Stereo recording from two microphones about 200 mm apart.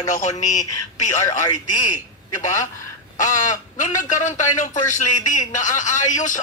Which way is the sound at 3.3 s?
40° left (ahead or behind).